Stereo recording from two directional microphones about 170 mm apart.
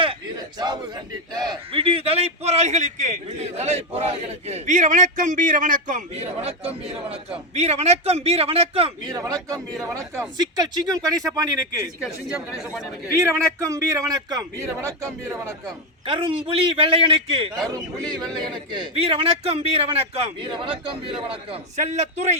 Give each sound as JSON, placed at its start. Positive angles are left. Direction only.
{"t": 0.6, "sound": "a man's voice", "side_deg": -25}
{"t": 9.1, "sound": "speech", "side_deg": -20}
{"t": 12.0, "sound": "speech", "side_deg": 0}
{"t": 13.1, "sound": "a man's voice", "side_deg": -15}
{"t": 16.0, "sound": "a man's voice", "side_deg": -30}
{"t": 18.3, "sound": "speech", "side_deg": 0}
{"t": 18.5, "sound": "a man's voice", "side_deg": -35}
{"t": 21.8, "sound": "a man's voice", "side_deg": -40}